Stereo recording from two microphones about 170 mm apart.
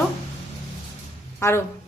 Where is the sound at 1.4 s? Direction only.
15° left (ahead or behind).